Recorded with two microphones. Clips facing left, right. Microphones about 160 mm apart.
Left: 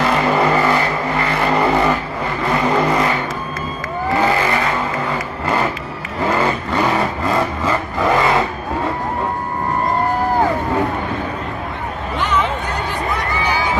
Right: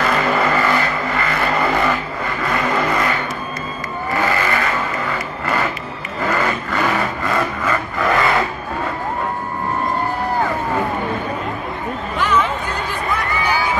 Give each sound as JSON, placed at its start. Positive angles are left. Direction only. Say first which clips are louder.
{"t": 0.0, "sound": "vehicle", "louder": "left 2 dB", "side_deg": 25}
{"t": 4.2, "sound": "vehicle", "louder": "left 2 dB", "side_deg": 20}
{"t": 6.2, "sound": "vehicle", "louder": "left 2 dB", "side_deg": 20}